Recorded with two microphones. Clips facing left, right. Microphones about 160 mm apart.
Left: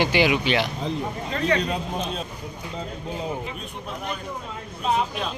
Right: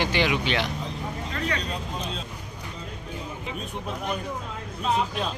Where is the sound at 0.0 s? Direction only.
10° left (ahead or behind).